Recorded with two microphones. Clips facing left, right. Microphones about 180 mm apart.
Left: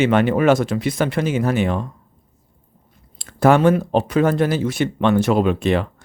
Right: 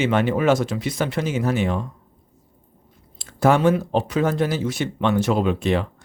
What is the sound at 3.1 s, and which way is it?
Speech, 55° left (ahead or behind).